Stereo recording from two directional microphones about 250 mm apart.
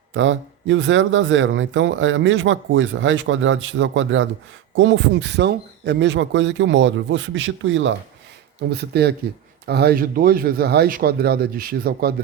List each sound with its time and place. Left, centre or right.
0.1 s speech: right